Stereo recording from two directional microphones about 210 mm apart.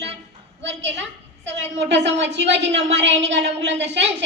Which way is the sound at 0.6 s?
60° right (ahead or behind).